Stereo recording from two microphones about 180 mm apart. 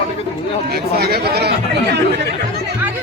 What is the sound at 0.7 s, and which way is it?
Speech, 60° right (ahead or behind).